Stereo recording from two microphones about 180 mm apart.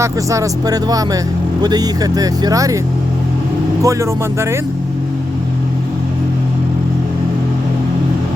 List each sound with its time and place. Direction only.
0.0 s speech: 15° right (ahead or behind)
3.8 s speech: 15° right (ahead or behind)